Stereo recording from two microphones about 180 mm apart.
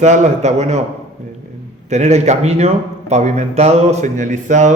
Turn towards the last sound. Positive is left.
turn(degrees=-40)  # may be behind; listen again after turning